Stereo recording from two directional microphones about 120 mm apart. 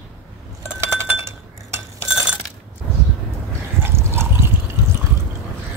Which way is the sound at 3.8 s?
20° right (ahead or behind).